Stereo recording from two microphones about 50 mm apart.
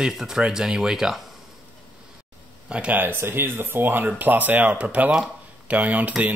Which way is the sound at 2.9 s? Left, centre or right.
Right.